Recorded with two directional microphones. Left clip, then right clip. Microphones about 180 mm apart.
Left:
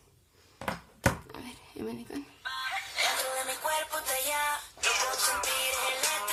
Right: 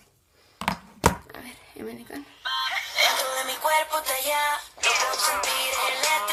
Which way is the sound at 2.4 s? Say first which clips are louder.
Right 8 dB; 20° right (ahead or behind).